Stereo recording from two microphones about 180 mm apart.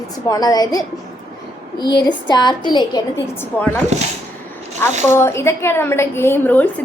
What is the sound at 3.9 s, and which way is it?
Speech, 40° right (ahead or behind).